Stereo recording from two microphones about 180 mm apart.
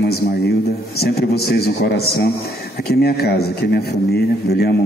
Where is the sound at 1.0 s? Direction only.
60° left (ahead or behind).